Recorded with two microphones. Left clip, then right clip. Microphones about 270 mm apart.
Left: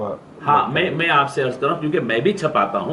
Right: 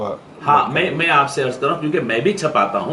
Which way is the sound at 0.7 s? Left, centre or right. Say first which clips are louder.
Right 2 dB; centre.